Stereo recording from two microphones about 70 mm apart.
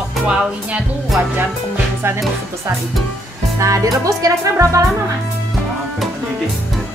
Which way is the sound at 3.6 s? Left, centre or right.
Right.